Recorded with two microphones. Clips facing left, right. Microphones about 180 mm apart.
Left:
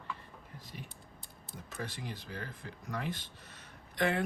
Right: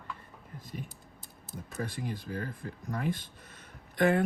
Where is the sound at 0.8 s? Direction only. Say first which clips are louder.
Right 1 dB; 5° right (ahead or behind).